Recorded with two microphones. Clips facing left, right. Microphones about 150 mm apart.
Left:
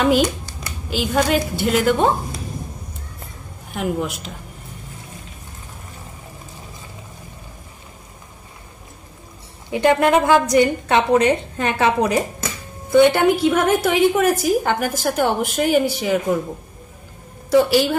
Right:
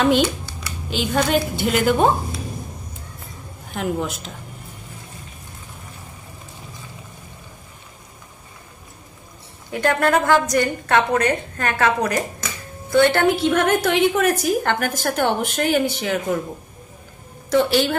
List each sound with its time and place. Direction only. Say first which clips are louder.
0.5 s a sound: even; 45° left (ahead or behind)
0.8 s a woman's voice: left 2 dB; 5° left (ahead or behind)
3.7 s a woman's voice: left 1 dB; 5° left (ahead or behind)
9.7 s a woman's voice: left 3 dB; 15° left (ahead or behind)
17.5 s a woman's voice: left 3 dB; 10° left (ahead or behind)